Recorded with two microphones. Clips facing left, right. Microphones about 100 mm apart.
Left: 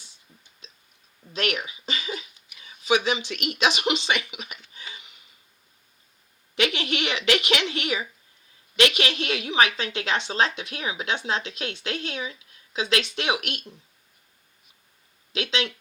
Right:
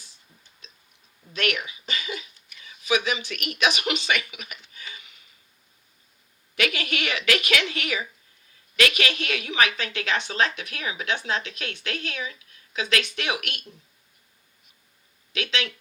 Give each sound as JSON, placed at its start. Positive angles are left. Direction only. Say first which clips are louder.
{"t": 1.3, "sound": "a sound", "louder": "even", "side_deg": 30}
{"t": 2.6, "sound": "speech", "louder": "left 2 dB", "side_deg": 30}
{"t": 6.6, "sound": "a woman's voice", "louder": "left 2 dB", "side_deg": 25}
{"t": 15.3, "sound": "speech", "louder": "left 2 dB", "side_deg": 30}